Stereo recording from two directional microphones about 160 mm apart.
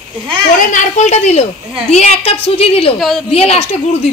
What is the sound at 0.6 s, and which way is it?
A woman's voice, 50° left (ahead or behind).